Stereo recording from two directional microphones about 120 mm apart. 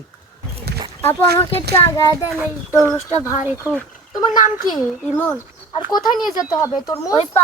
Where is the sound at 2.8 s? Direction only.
20° right (ahead or behind).